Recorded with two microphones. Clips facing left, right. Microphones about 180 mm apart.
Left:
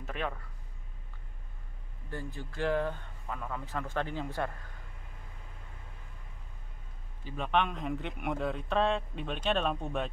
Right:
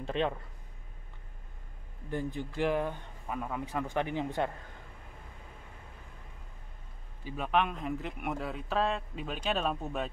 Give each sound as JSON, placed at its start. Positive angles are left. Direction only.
{"t": 0.0, "sound": "speech", "side_deg": -25}
{"t": 2.0, "sound": "speech", "side_deg": -15}
{"t": 7.2, "sound": "a man's voice", "side_deg": -5}